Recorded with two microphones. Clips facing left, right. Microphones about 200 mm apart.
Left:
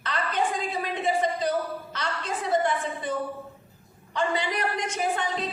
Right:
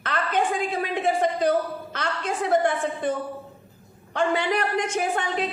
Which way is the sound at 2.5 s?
55° right (ahead or behind).